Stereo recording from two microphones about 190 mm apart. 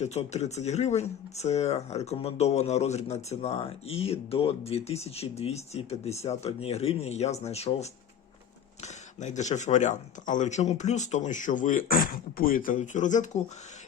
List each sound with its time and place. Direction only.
0.0 s speech: 35° left (ahead or behind)